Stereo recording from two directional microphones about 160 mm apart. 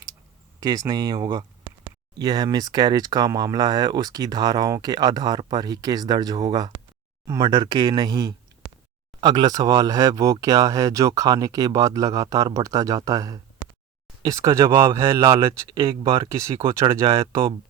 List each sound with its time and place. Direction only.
0.6 s speech: 25° right (ahead or behind)
16.3 s speech: 20° right (ahead or behind)